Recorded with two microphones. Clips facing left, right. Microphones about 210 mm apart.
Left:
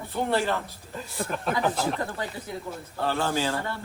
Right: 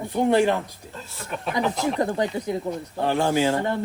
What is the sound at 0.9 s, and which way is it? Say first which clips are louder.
Speech: left 2 dB; 15° left (ahead or behind).